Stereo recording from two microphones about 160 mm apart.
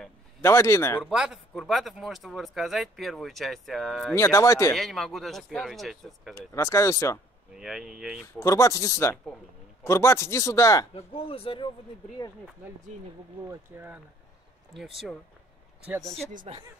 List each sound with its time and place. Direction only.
0.4 s speech: 15° left (ahead or behind)
1.0 s speech: 5° right (ahead or behind)
4.1 s speech: 15° left (ahead or behind)
4.7 s speech: centre (ahead or behind)
6.3 s speech: 15° left (ahead or behind)
7.5 s speech: centre (ahead or behind)
8.4 s speech: 20° left (ahead or behind)
9.1 s speech: 5° left (ahead or behind)
9.8 s speech: 15° left (ahead or behind)
11.0 s speech: 35° left (ahead or behind)
13.5 s speech: 15° right (ahead or behind)
14.7 s speech: centre (ahead or behind)
16.3 s speech: 50° right (ahead or behind)